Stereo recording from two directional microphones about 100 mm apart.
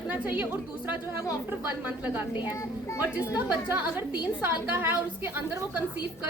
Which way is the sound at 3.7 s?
15° right (ahead or behind).